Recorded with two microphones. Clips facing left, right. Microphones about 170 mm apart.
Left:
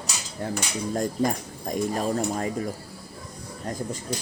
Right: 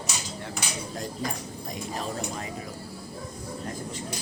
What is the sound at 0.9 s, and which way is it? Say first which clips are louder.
Speech: left 10 dB; 50° left (ahead or behind).